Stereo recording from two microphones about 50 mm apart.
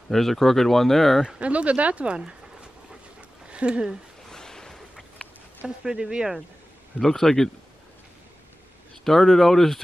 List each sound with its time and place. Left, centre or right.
0.1 s speech: centre
1.4 s speech: right
3.4 s a sound: right
4.3 s a sound: centre
5.9 s speech: centre
7.0 s a man's voice: centre
9.0 s speech: centre